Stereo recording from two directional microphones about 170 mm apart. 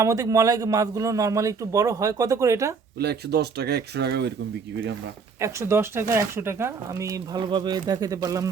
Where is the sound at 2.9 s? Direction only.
70° right (ahead or behind).